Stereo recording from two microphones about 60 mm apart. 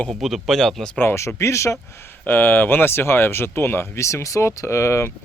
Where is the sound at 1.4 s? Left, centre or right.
Left.